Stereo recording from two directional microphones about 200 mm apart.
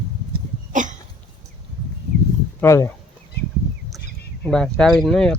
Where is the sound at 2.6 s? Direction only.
15° left (ahead or behind).